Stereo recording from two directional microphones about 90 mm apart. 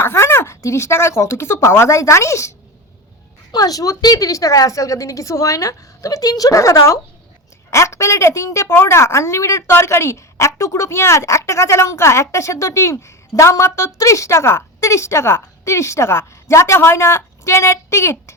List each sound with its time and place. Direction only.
0.0 s a woman's voice: 25° left (ahead or behind)